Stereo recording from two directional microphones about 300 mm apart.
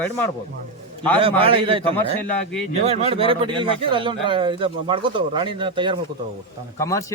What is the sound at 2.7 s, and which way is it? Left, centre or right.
Speech, centre.